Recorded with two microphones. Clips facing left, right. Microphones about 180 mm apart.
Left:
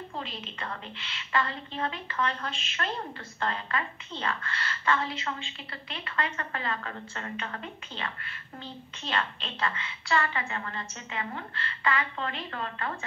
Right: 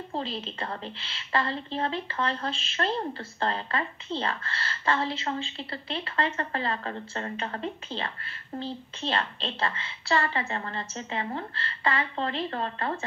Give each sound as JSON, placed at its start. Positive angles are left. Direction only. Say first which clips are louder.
{"t": 0.1, "sound": "a woman's voice", "louder": "right 6 dB", "side_deg": -30}